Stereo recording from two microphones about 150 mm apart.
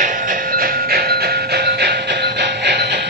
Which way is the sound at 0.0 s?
60° right (ahead or behind).